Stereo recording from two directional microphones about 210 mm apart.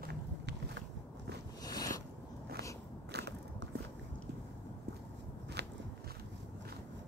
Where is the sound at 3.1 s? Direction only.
55° right (ahead or behind).